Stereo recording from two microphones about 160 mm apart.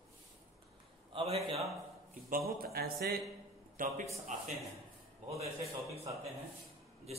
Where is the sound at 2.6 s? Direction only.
75° right (ahead or behind).